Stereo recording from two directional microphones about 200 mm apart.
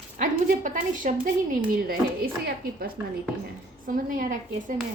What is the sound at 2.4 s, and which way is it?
A woman's voice, 50° right (ahead or behind).